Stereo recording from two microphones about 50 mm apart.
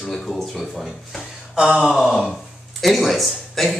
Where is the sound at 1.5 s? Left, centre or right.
Centre.